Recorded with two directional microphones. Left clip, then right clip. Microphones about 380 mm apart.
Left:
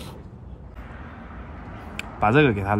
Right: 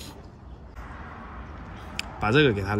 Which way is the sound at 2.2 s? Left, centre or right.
Centre.